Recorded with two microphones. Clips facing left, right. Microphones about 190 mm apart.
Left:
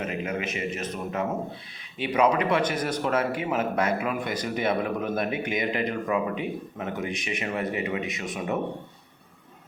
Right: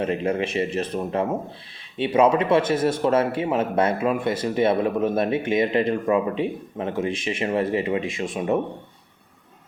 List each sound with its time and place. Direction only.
0.0 s a man's voice: 30° right (ahead or behind)